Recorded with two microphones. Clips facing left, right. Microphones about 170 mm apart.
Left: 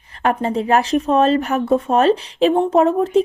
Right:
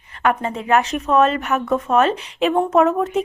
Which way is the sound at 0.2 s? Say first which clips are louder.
Left 2 dB; 35° left (ahead or behind).